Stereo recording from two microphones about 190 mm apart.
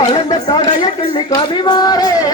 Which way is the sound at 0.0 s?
25° left (ahead or behind).